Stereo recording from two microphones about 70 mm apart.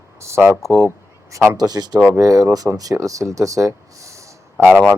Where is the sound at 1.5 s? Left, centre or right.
Right.